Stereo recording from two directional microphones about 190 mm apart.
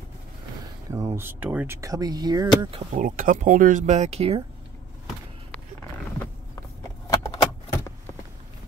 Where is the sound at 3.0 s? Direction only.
45° right (ahead or behind).